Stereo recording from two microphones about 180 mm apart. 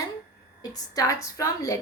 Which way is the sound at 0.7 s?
20° left (ahead or behind).